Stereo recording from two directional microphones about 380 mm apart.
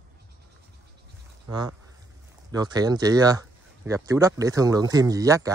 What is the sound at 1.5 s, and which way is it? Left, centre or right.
Speech, centre.